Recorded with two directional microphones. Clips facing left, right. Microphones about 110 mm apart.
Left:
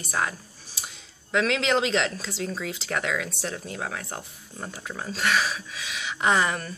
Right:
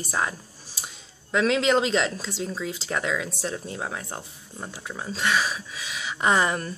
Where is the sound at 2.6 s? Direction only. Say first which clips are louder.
Right 1 dB; 25° right (ahead or behind).